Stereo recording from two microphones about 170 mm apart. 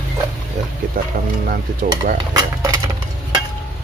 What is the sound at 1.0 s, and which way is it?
Speech, 55° right (ahead or behind).